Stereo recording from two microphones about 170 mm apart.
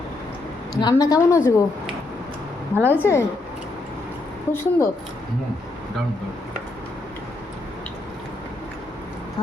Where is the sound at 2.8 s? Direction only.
10° right (ahead or behind).